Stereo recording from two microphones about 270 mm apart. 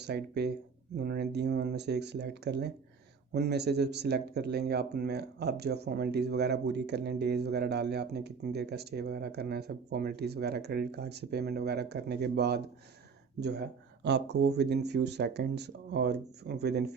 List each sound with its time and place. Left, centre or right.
0.0 s speech: right